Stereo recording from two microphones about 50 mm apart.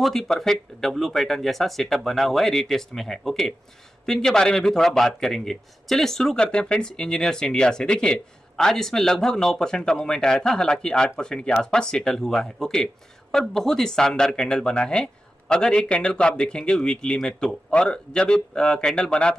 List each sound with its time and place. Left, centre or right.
0.0 s speech: centre
6.4 s speech: centre